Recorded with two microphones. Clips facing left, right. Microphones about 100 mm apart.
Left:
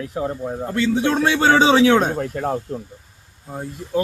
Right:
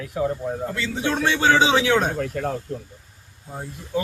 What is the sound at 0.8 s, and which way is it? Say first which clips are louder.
A man's voice: left 6 dB; 50° left (ahead or behind).